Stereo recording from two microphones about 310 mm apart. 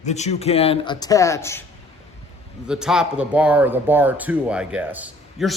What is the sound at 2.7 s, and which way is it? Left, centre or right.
Speech, centre.